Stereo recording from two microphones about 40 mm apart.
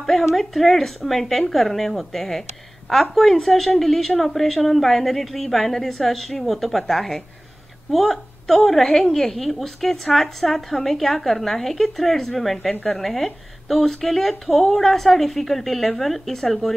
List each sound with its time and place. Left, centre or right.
0.2 s a woman's voice: centre